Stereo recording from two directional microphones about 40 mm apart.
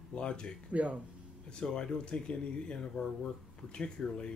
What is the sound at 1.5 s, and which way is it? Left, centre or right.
Speech, left.